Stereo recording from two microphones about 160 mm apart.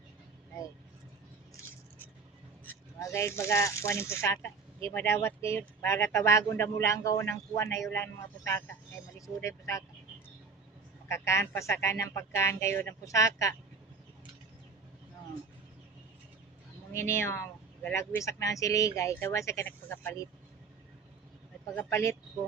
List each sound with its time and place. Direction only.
2.6 s speech: 15° left (ahead or behind)
11.1 s speech: 15° left (ahead or behind)
16.9 s speech: 15° left (ahead or behind)
21.8 s speech: 15° left (ahead or behind)